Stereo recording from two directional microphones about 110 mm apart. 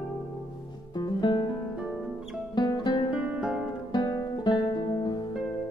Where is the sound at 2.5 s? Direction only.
40° left (ahead or behind).